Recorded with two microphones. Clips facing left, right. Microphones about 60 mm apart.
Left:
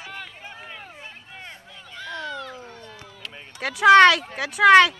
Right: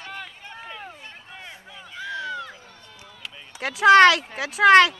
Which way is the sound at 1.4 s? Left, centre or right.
Centre.